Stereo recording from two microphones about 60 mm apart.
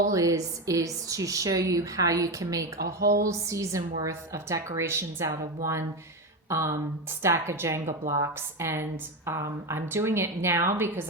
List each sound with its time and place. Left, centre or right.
0.1 s a woman's voice: right
3.2 s a woman's voice: right
7.2 s a woman's voice: right
8.6 s a woman's voice: right